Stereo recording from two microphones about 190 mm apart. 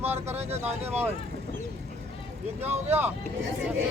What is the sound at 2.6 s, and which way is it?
Speech, 35° right (ahead or behind).